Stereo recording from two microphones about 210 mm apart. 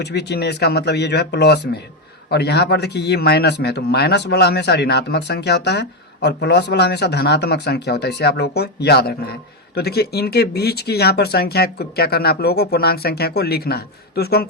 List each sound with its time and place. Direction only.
0.0 s speech: 55° left (ahead or behind)